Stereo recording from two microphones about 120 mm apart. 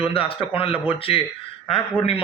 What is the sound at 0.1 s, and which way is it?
A man's voice, 50° left (ahead or behind).